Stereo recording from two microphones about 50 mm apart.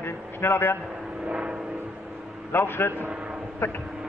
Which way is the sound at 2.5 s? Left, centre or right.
Left.